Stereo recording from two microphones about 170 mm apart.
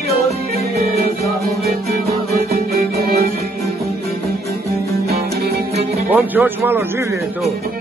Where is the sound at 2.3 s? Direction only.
65° right (ahead or behind).